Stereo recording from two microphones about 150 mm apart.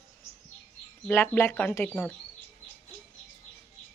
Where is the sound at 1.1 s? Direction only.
15° left (ahead or behind).